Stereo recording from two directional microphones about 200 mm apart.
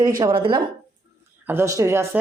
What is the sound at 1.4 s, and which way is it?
Speech, 10° right (ahead or behind).